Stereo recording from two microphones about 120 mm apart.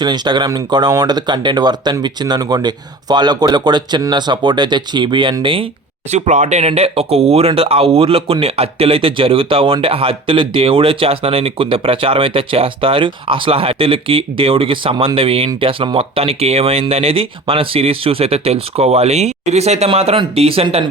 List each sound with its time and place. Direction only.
0.0 s speech: 40° right (ahead or behind)
6.1 s speech: 70° right (ahead or behind); by 20.8 s 55° right (ahead or behind)